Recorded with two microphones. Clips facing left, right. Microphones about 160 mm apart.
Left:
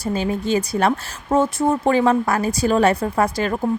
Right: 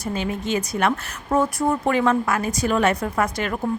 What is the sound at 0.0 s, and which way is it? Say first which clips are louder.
Speech: left 4 dB; 35° left (ahead or behind).